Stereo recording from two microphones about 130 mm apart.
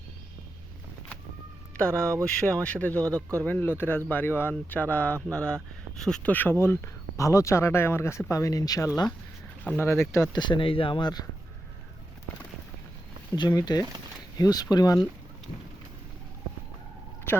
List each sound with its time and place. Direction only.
1.7 s speech: 10° left (ahead or behind); by 8.9 s 25° left (ahead or behind)
9.6 s speech: 15° left (ahead or behind); by 11.3 s 35° left (ahead or behind)
13.3 s speech: 30° left (ahead or behind)